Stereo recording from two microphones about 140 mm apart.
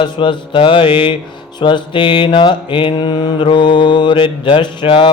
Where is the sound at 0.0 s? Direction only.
35° left (ahead or behind).